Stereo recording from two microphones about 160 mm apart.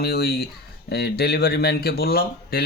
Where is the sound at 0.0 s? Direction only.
85° left.